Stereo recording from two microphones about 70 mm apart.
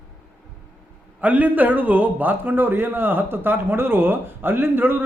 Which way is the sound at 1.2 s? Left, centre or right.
Right.